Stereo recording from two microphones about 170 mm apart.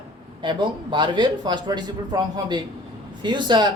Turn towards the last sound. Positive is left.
turn(degrees=-25)  # may be behind; listen again after turning